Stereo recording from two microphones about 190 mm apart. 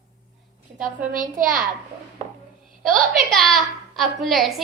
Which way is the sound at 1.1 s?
45° right (ahead or behind).